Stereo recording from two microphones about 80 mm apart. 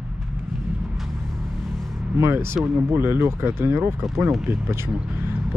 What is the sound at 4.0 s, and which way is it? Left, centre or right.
Speech, centre.